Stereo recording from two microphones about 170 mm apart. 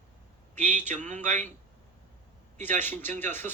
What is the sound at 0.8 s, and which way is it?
Speech, 45° right (ahead or behind).